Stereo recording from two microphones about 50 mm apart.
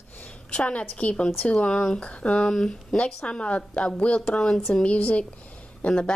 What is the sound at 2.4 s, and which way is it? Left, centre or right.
A woman's voice, centre.